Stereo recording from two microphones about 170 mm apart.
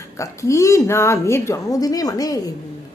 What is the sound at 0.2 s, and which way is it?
A woman's voice, 15° left (ahead or behind).